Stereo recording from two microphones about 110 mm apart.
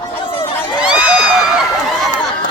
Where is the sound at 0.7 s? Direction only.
10° right (ahead or behind).